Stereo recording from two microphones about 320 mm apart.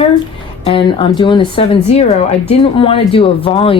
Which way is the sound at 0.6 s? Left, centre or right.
Centre.